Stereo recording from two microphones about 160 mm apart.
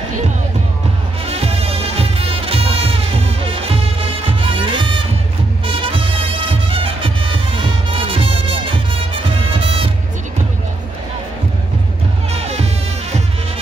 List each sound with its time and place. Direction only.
1.2 s music: 40° right (ahead or behind)
12.3 s music: 40° right (ahead or behind)